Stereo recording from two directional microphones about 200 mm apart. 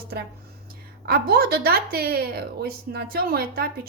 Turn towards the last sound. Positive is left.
turn(degrees=-50)  # may be behind; listen again after turning